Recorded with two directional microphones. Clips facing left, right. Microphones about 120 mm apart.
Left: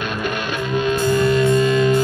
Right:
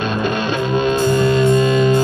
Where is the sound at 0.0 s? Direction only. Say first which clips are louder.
Right 5 dB; 25° right (ahead or behind).